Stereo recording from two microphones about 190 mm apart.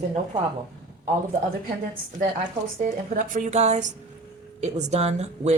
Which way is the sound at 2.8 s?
45° right (ahead or behind).